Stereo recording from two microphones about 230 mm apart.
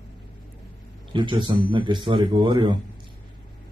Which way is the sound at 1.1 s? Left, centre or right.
Centre.